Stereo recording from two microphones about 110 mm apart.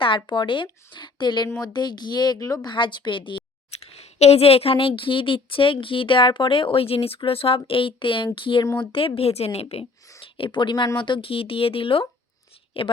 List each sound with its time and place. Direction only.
0.3 s speech: 50° left (ahead or behind); by 2.7 s 35° left (ahead or behind)
2.7 s speech: 45° left (ahead or behind)
3.7 s speech: 70° left (ahead or behind)
10.2 s speech: 55° left (ahead or behind)